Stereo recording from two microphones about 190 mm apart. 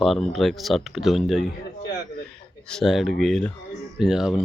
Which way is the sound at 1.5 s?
55° left (ahead or behind).